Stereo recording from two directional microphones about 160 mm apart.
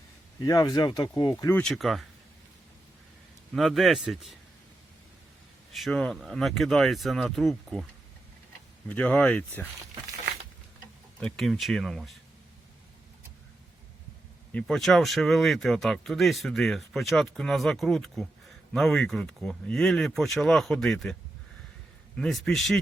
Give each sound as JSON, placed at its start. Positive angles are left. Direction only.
{"t": 0.3, "sound": "speech", "side_deg": 20}
{"t": 1.5, "sound": "speech", "side_deg": 5}
{"t": 3.5, "sound": "speech", "side_deg": 0}
{"t": 5.7, "sound": "speech", "side_deg": 0}
{"t": 8.9, "sound": "speech", "side_deg": 10}
{"t": 11.2, "sound": "speech", "side_deg": 5}
{"t": 14.5, "sound": "speech", "side_deg": 0}